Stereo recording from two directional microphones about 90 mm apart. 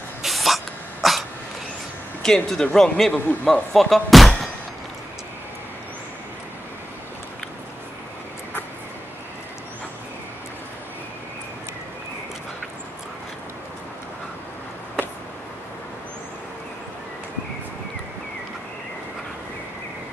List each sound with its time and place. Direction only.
0.2 s sneeze: centre (ahead or behind)
1.0 s cough: centre (ahead or behind)
2.2 s speech: 5° left (ahead or behind)